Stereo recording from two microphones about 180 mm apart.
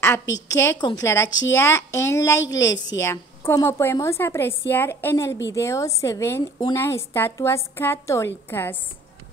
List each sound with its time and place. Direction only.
0.0 s a woman's voice: 15° left (ahead or behind)